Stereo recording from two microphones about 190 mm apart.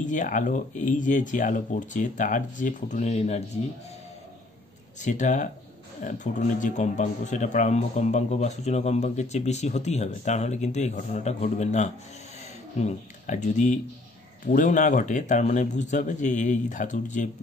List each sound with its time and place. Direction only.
0.0 s speech: 40° left (ahead or behind)
5.0 s speech: 40° left (ahead or behind)